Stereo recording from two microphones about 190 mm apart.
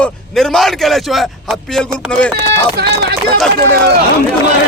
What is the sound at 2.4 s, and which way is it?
Speech, 60° right (ahead or behind).